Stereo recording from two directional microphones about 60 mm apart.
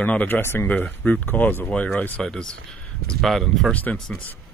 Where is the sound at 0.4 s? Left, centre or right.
Left.